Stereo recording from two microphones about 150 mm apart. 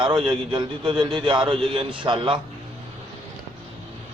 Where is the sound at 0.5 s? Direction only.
30° right (ahead or behind).